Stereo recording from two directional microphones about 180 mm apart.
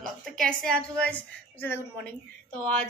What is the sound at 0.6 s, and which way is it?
A woman's voice, 5° left (ahead or behind).